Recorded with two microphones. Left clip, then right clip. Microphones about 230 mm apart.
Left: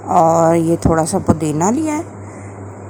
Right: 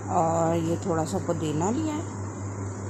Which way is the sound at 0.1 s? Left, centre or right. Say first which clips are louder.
Left 13 dB; left.